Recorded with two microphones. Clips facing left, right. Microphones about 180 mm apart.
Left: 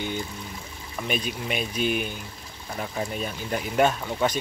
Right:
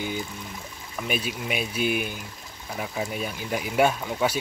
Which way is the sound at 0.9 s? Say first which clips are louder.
Even; 5° right (ahead or behind).